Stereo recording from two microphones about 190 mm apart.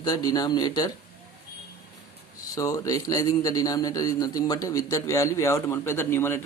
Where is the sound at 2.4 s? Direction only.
20° left (ahead or behind).